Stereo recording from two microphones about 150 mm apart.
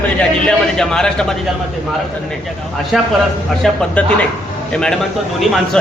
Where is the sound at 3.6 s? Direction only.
10° left (ahead or behind).